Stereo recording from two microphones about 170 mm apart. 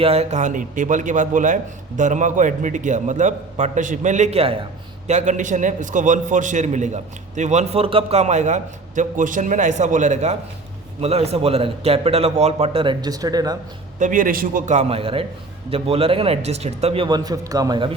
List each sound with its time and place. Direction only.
0.0 s a man's voice: 35° right (ahead or behind)
5.0 s a man's voice: 45° right (ahead or behind); by 13.6 s 20° right (ahead or behind)
14.0 s a man's voice: 50° right (ahead or behind); by 17.9 s 25° right (ahead or behind)